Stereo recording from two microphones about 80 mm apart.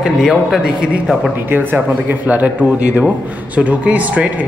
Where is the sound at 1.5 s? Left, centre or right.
Right.